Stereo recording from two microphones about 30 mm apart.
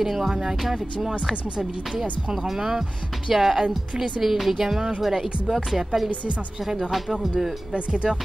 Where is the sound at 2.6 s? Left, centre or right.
Centre.